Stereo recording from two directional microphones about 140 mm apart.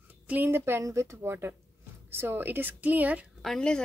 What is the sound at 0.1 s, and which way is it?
Speech, 15° right (ahead or behind).